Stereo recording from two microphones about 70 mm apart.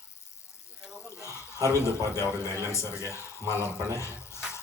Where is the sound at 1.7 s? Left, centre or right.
Left.